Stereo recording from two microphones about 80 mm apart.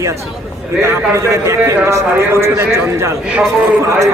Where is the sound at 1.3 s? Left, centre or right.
Right.